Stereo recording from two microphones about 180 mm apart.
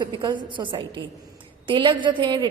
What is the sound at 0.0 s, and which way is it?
A woman's voice, 25° right (ahead or behind).